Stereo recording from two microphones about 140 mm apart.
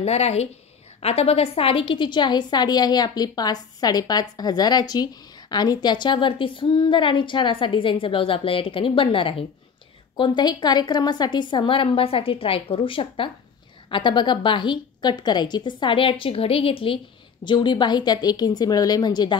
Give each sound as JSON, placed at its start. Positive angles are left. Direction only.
{"t": 0.0, "sound": "a woman's voice", "side_deg": 50}